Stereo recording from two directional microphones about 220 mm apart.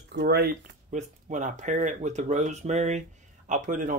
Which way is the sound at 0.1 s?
45° right (ahead or behind).